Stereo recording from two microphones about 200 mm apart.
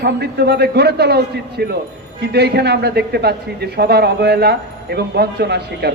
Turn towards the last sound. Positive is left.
turn(degrees=-55)  # may be behind; listen again after turning